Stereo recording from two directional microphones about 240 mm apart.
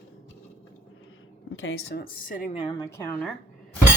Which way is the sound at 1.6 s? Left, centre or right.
Left.